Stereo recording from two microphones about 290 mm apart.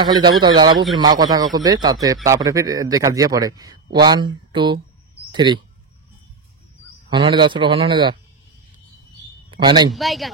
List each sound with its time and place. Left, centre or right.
0.0 s a man's voice: centre
7.1 s a man's voice: centre
9.5 s a man's voice: centre
9.9 s speech: centre